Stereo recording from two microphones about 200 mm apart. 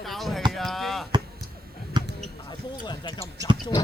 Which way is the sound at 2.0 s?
20° right (ahead or behind).